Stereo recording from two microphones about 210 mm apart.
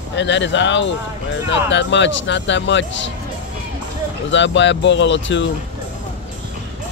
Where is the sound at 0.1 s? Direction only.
60° left (ahead or behind).